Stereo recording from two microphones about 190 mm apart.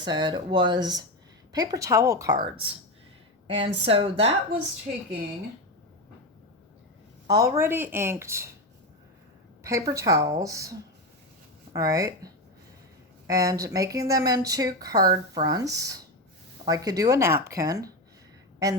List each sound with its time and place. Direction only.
0.0 s a woman's voice: 25° right (ahead or behind)
7.3 s speech: 20° right (ahead or behind)
9.6 s speech: 15° right (ahead or behind)